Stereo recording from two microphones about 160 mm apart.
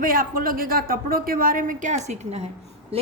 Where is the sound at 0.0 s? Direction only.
60° right (ahead or behind); by 2.4 s 45° right (ahead or behind).